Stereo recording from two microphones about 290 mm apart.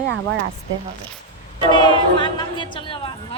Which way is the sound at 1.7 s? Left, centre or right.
Centre.